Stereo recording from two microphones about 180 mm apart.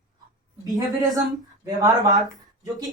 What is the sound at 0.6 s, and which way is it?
Speech, 20° right (ahead or behind).